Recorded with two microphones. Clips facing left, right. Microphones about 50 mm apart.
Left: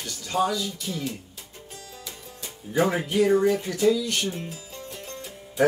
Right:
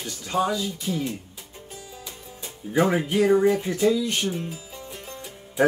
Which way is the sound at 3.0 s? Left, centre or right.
Right.